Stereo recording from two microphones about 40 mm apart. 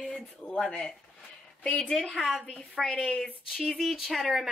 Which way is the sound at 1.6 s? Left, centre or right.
Left.